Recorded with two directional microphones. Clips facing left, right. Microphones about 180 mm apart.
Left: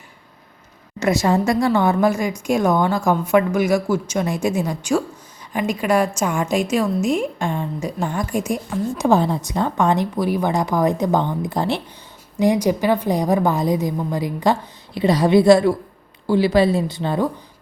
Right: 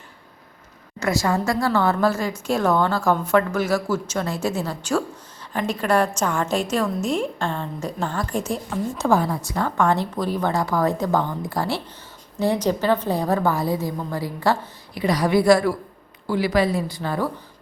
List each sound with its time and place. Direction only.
0.9 s a woman's voice: 20° left (ahead or behind)